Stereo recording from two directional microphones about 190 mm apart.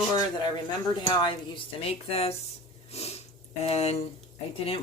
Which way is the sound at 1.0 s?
25° left (ahead or behind).